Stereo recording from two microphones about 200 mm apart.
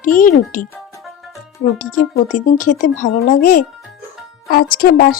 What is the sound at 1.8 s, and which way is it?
Speech, 40° left (ahead or behind).